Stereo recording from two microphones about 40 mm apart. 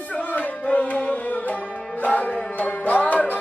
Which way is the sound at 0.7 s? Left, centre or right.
Left.